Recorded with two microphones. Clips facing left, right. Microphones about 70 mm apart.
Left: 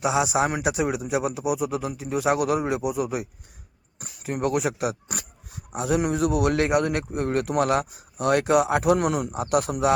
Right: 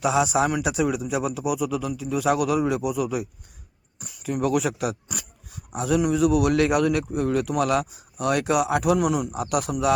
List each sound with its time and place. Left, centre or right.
0.0 s speech: centre
0.4 s a man's voice: left
4.5 s a man's voice: left
6.0 s a man's voice: left
6.9 s a man's voice: left